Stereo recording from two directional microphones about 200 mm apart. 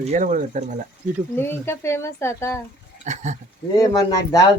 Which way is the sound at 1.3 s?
10° left (ahead or behind).